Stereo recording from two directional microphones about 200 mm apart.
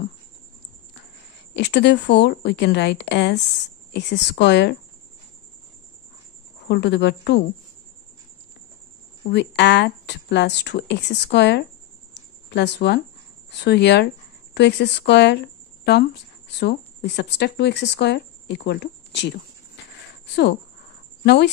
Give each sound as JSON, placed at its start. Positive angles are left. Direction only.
{"t": 1.5, "sound": "speech", "side_deg": 60}
{"t": 6.7, "sound": "speech", "side_deg": 60}
{"t": 9.3, "sound": "speech", "side_deg": 60}
{"t": 12.1, "sound": "a sound", "side_deg": 60}
{"t": 13.5, "sound": "speech", "side_deg": 55}
{"t": 21.2, "sound": "speech", "side_deg": 55}